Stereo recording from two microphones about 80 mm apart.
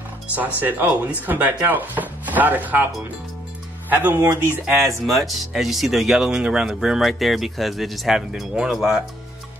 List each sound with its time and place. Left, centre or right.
0.3 s speech: right
3.9 s speech: right
4.8 s speech: centre